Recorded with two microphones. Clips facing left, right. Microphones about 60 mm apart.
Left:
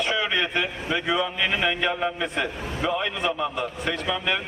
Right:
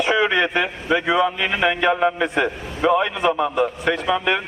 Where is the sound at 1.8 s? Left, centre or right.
Right.